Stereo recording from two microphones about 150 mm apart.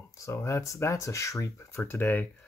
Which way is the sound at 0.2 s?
20° left (ahead or behind).